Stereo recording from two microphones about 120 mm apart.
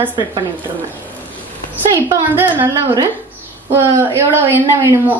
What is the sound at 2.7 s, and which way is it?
A woman's voice, 20° right (ahead or behind).